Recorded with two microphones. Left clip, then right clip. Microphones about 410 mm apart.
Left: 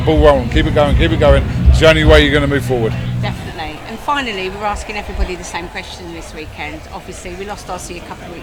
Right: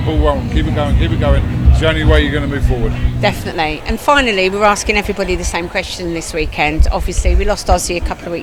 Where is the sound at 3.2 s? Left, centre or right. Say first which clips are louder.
Right 11 dB; right.